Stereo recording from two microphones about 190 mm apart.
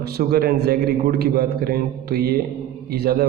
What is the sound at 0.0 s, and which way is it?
Speech, 55° right (ahead or behind).